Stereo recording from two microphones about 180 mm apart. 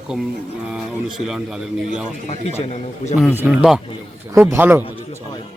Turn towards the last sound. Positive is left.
turn(degrees=-10)  # may be behind; listen again after turning